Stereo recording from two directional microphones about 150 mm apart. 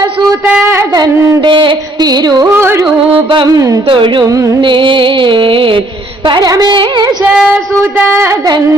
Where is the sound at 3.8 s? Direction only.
35° right (ahead or behind).